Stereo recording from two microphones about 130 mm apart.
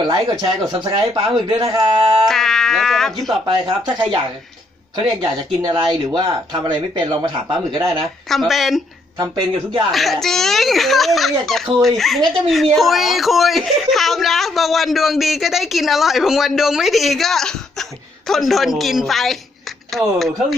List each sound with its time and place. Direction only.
0.0 s speech: 35° right (ahead or behind)
2.2 s speech: 5° left (ahead or behind)
3.4 s speech: 35° right (ahead or behind)
5.0 s speech: 35° right (ahead or behind)
8.3 s speech: centre (ahead or behind)
9.1 s speech: 30° right (ahead or behind)
9.9 s a woman's voice: centre (ahead or behind)